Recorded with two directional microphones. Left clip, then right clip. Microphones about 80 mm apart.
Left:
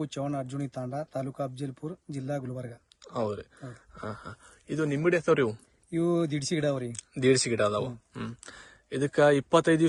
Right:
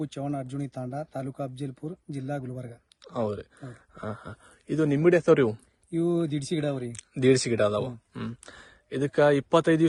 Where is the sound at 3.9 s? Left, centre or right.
Right.